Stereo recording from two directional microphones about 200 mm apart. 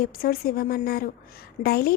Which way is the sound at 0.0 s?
50° left (ahead or behind).